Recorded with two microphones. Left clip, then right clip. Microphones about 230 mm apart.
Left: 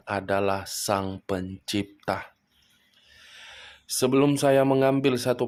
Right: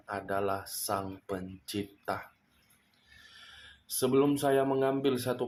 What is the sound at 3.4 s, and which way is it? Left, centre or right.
Speech, left.